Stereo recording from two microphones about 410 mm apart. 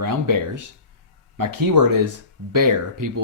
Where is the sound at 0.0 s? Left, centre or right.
Right.